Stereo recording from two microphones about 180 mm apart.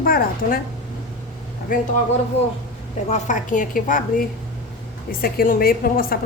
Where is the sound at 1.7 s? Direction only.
50° left (ahead or behind).